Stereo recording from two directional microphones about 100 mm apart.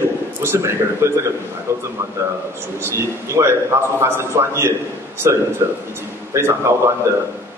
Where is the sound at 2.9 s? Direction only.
25° right (ahead or behind).